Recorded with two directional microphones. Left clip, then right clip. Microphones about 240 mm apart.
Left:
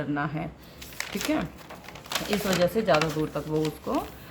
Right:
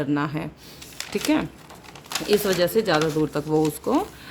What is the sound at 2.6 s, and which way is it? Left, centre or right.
Speech, right.